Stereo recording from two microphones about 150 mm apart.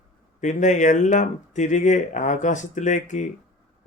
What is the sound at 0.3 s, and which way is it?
Speech, 55° left (ahead or behind).